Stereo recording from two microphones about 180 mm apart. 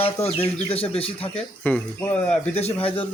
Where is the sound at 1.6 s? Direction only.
10° left (ahead or behind).